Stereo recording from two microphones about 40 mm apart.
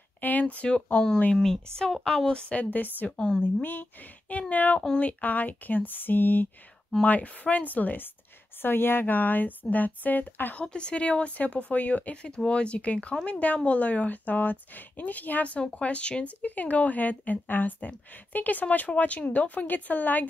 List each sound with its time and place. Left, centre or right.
0.2 s speech: left
1.3 s speech: centre
2.5 s a woman's voice: left
3.1 s speech: centre
4.3 s a woman's voice: left
7.1 s a woman's voice: left
8.6 s a woman's voice: left
10.5 s speech: left
16.3 s a woman's voice: left